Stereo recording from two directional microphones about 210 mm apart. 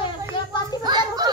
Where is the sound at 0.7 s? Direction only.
20° right (ahead or behind).